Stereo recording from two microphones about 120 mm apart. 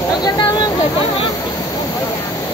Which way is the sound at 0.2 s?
35° left (ahead or behind).